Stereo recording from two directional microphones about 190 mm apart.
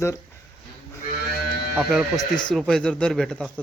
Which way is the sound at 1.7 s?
5° right (ahead or behind).